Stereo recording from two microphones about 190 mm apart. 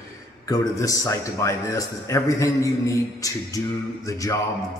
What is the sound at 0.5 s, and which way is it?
A man's voice, 15° left (ahead or behind).